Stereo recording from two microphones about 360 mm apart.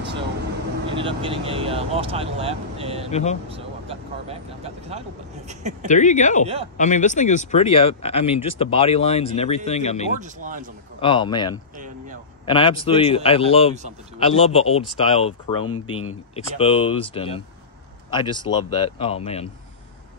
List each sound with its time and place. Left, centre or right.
0.9 s speech: centre
3.1 s speech: centre
3.4 s speech: centre
5.9 s speech: centre
10.2 s speech: right
11.0 s speech: centre
15.6 s speech: left
16.3 s speech: centre